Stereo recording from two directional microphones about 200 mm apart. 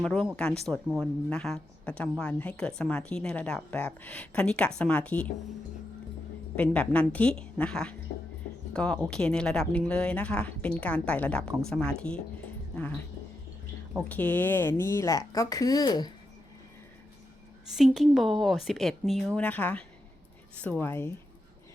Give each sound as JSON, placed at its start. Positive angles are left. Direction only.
{"t": 0.0, "sound": "speech", "side_deg": 0}
{"t": 6.6, "sound": "a woman's voice", "side_deg": 5}
{"t": 12.7, "sound": "dog", "side_deg": 5}
{"t": 13.9, "sound": "a woman's voice", "side_deg": 10}
{"t": 17.7, "sound": "a woman's voice", "side_deg": 0}